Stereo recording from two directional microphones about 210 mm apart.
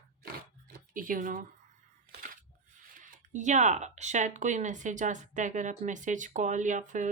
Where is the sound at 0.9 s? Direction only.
40° right (ahead or behind).